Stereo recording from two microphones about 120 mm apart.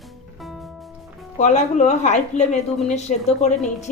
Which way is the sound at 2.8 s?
90° left.